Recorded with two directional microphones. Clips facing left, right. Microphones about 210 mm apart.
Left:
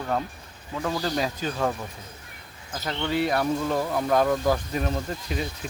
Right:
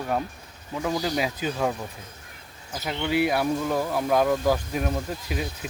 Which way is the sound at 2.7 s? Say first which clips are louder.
Right 2 dB; 10° right (ahead or behind).